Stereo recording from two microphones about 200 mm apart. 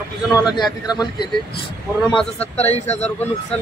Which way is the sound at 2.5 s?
35° left (ahead or behind).